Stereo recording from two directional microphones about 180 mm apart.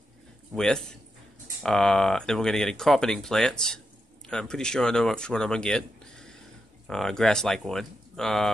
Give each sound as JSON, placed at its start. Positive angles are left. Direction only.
{"t": 0.6, "sound": "speech", "side_deg": 5}